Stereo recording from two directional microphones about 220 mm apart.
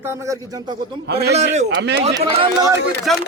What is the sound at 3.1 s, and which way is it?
Speech, centre (ahead or behind).